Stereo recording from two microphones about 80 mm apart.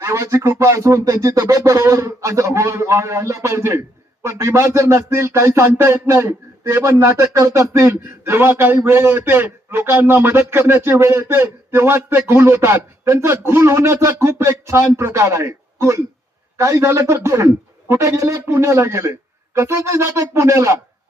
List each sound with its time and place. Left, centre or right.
0.0 s a man's voice: right